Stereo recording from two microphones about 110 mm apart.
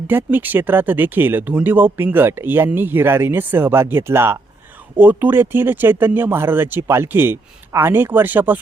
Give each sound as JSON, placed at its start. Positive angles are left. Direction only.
{"t": 0.1, "sound": "speech", "side_deg": -20}